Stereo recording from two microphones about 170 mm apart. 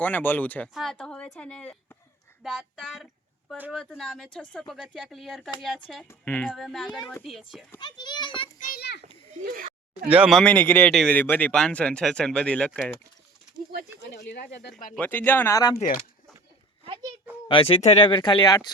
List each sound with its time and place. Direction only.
0.0 s speech: 10° left (ahead or behind)
6.1 s speech: 10° left (ahead or behind)
7.8 s speech: 25° left (ahead or behind)
8.5 s children playing: 65° left (ahead or behind)
9.4 s a sound: 60° right (ahead or behind)
10.1 s speech: 5° right (ahead or behind)
14.3 s speech: 80° left
14.9 s speech: 10° left (ahead or behind)
17.5 s speech: 35° left (ahead or behind)